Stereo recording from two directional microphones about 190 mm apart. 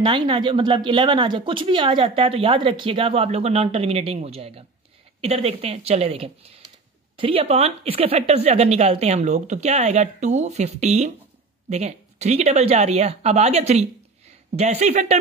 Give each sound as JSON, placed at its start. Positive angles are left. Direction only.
{"t": 0.0, "sound": "speech", "side_deg": -25}